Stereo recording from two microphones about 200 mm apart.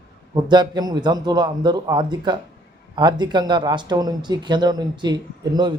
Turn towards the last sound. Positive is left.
turn(degrees=-20)  # may be behind; listen again after turning